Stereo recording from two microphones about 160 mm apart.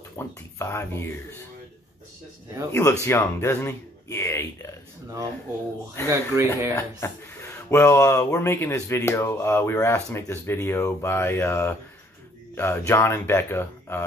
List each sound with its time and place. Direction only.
0.2 s speech: 15° left (ahead or behind)
2.7 s speech: 15° left (ahead or behind)
6.0 s speech: 15° right (ahead or behind)
6.7 s speech: 15° left (ahead or behind)